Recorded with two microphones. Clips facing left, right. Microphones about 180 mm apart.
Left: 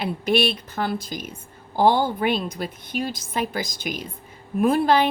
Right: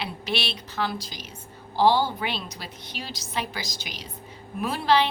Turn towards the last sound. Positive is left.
turn(degrees=50)  # may be behind; listen again after turning